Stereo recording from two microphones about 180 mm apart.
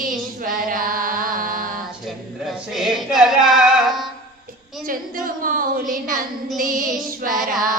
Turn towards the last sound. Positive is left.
turn(degrees=0)  # may be behind; listen again after turning